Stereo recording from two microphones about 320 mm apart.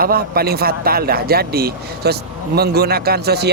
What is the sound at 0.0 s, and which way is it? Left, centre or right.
Speech, right.